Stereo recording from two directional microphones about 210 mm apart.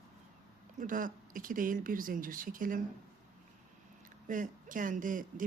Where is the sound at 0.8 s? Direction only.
40° right (ahead or behind).